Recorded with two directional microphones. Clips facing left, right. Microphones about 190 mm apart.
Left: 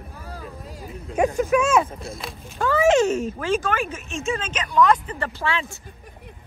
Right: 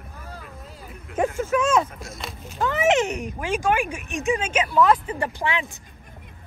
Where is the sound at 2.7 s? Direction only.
20° right (ahead or behind).